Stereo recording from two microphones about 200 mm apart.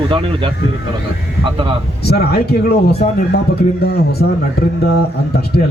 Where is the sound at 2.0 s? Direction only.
55° left (ahead or behind).